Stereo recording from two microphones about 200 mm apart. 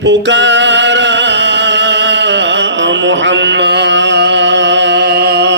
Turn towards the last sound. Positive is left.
turn(degrees=-55)  # may be behind; listen again after turning